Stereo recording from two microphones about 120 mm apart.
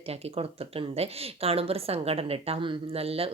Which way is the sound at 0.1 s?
55° right (ahead or behind).